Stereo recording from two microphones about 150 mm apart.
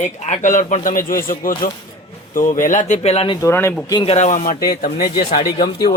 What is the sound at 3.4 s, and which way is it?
Speech, 15° left (ahead or behind).